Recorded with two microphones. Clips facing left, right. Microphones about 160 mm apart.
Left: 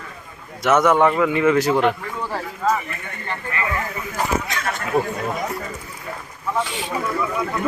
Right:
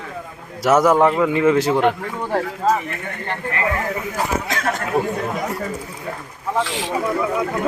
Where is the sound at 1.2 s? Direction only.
30° right (ahead or behind).